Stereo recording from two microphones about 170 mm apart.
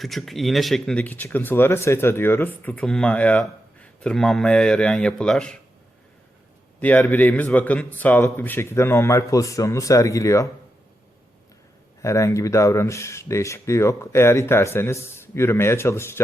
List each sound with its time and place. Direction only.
0.0 s speech: centre (ahead or behind)
6.7 s speech: 10° left (ahead or behind)
12.0 s speech: 15° left (ahead or behind)